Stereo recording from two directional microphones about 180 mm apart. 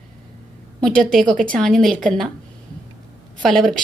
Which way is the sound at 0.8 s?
5° left (ahead or behind).